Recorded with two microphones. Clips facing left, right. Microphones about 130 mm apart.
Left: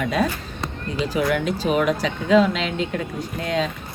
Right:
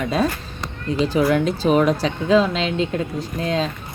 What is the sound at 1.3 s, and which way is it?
A woman's voice, 35° right (ahead or behind).